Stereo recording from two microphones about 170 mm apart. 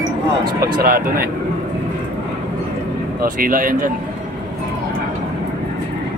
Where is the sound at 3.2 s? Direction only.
55° right (ahead or behind).